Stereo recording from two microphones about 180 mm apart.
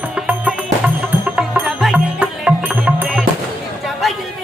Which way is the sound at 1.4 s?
Centre (ahead or behind).